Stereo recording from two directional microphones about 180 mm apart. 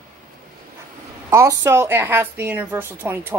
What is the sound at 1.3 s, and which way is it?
A woman's voice, 15° right (ahead or behind).